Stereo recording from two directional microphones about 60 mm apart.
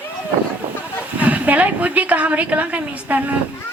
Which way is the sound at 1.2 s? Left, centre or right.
Right.